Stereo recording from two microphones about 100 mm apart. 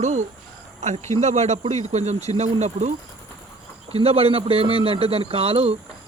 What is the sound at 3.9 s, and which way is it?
Speech, 80° right.